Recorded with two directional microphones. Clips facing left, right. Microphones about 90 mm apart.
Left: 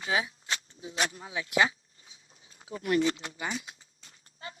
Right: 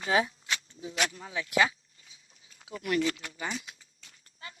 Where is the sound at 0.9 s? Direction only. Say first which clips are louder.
Even; 30° left (ahead or behind).